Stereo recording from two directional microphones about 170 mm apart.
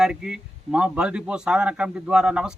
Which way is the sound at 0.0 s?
5° right (ahead or behind).